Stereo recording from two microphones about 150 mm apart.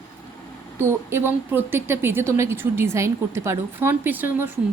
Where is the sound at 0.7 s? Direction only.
15° right (ahead or behind).